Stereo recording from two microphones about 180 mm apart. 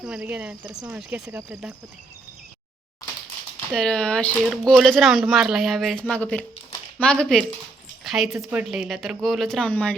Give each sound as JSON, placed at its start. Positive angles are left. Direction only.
{"t": 0.0, "sound": "speech", "side_deg": -5}
{"t": 0.7, "sound": "speech", "side_deg": -20}
{"t": 0.9, "sound": "speech", "side_deg": -5}
{"t": 3.8, "sound": "speech", "side_deg": 5}